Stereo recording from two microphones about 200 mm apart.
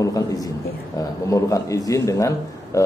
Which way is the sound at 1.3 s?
15° left (ahead or behind).